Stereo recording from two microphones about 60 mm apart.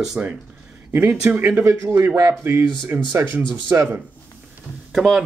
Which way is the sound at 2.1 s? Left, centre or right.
Right.